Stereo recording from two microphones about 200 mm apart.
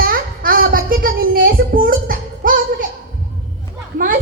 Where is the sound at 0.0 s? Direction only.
45° right (ahead or behind).